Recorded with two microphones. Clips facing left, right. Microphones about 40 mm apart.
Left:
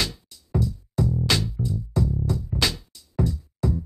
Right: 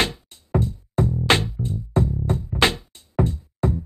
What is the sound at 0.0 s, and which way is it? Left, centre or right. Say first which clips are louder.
Music: right 5 dB; right.